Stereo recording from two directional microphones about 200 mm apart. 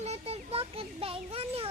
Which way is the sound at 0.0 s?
30° right (ahead or behind).